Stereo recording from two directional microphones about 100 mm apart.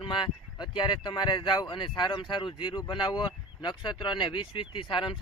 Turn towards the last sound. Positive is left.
turn(degrees=55)  # may be behind; listen again after turning